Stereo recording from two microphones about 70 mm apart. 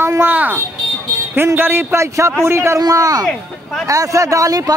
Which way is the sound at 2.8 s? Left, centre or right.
Right.